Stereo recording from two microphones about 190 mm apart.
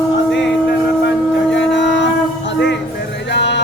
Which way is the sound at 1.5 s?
70° left (ahead or behind).